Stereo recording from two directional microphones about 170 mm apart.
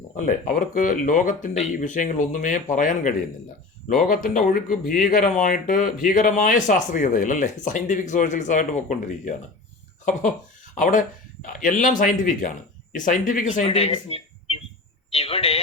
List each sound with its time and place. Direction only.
0.3 s speech: 50° left (ahead or behind)
10.8 s speech: 50° left (ahead or behind)
13.7 s speech: 35° left (ahead or behind)